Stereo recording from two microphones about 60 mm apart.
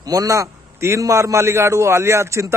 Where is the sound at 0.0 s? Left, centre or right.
Right.